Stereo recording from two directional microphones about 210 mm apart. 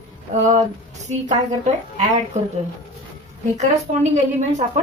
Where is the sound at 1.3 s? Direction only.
30° right (ahead or behind).